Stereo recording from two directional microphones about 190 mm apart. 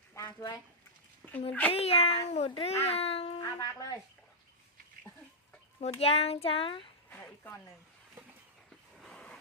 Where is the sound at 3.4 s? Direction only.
20° left (ahead or behind).